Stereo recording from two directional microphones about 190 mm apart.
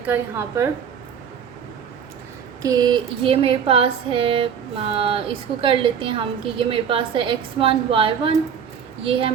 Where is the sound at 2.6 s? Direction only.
20° right (ahead or behind).